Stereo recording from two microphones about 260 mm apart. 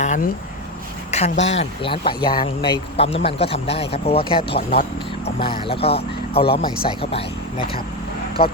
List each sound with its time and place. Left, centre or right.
0.0 s speech: left